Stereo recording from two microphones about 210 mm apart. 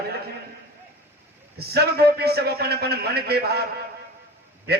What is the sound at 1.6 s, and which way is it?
A man's voice, 50° right (ahead or behind).